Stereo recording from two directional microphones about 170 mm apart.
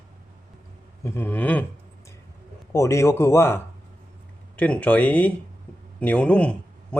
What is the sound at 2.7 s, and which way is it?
Speech, 15° left (ahead or behind).